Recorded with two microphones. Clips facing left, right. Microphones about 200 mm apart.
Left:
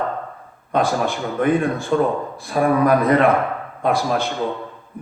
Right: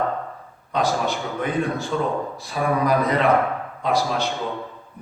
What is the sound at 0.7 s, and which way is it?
A man's voice, 50° left (ahead or behind).